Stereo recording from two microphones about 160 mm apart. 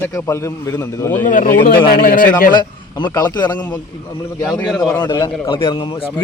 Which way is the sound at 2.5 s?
25° left (ahead or behind).